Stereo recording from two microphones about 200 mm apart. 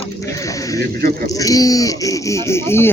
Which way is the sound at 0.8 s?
50° right (ahead or behind).